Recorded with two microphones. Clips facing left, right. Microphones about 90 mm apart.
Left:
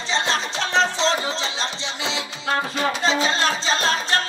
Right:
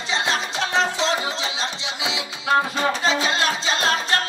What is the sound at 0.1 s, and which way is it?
Music, 30° left (ahead or behind).